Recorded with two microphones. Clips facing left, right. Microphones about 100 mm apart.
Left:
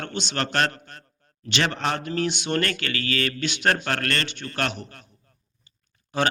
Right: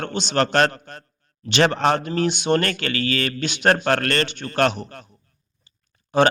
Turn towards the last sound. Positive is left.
turn(degrees=-30)  # may be behind; listen again after turning